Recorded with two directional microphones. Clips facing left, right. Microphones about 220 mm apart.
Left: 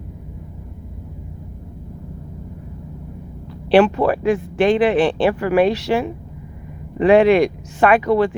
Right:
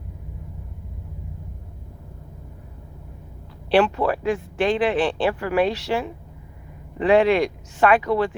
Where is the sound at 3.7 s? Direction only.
65° left (ahead or behind).